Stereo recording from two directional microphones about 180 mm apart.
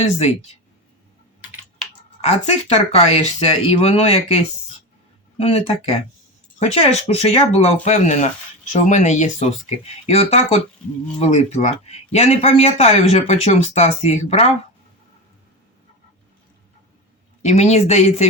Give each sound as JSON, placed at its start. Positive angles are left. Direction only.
{"t": 0.2, "sound": "speech", "side_deg": 35}
{"t": 2.2, "sound": "speech", "side_deg": 35}
{"t": 17.4, "sound": "speech", "side_deg": 35}